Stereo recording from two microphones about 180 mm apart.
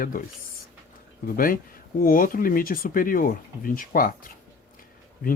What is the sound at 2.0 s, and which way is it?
Speech, 50° left (ahead or behind).